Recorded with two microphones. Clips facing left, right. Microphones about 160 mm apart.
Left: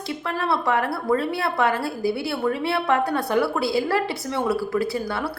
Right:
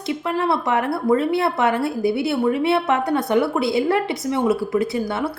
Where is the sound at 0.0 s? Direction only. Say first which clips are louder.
Right 5 dB; 20° right (ahead or behind).